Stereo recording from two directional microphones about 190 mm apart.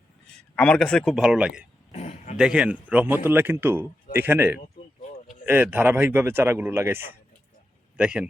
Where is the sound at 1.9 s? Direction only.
35° left (ahead or behind).